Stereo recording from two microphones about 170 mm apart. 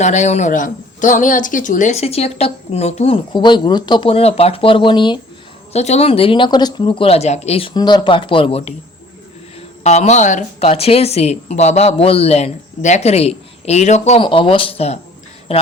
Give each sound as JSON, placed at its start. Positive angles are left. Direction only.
{"t": 0.0, "sound": "speech", "side_deg": 45}
{"t": 5.7, "sound": "speech", "side_deg": 40}
{"t": 7.7, "sound": "speech", "side_deg": 25}